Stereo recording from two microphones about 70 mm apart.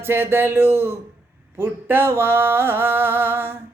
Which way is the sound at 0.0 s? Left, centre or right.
Right.